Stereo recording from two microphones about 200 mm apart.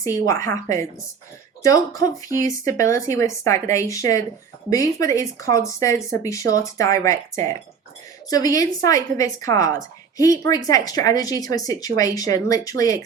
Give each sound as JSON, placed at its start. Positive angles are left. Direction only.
{"t": 0.0, "sound": "speech", "side_deg": 15}
{"t": 1.6, "sound": "speech", "side_deg": 15}